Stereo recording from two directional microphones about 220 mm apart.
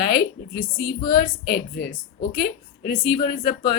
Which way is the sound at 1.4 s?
45° left (ahead or behind).